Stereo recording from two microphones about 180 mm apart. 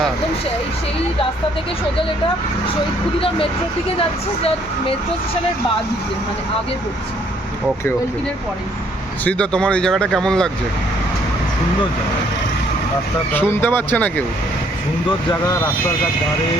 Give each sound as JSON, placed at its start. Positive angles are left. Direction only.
{"t": 3.2, "sound": "speech", "side_deg": 30}
{"t": 9.2, "sound": "speech", "side_deg": 5}
{"t": 13.3, "sound": "speech", "side_deg": 10}